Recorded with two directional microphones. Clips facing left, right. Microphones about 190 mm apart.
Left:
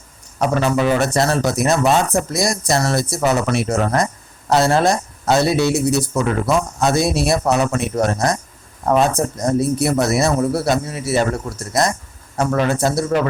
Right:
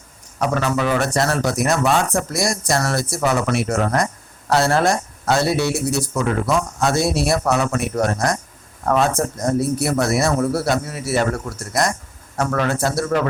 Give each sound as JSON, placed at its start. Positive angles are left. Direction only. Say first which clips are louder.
{"t": 0.3, "sound": "speech", "louder": "left 3 dB", "side_deg": 25}